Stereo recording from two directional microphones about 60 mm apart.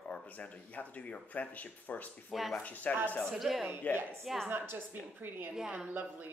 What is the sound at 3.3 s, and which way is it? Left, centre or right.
Speech, centre.